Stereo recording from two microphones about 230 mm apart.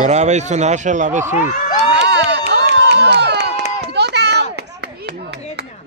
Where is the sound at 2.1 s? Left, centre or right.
Right.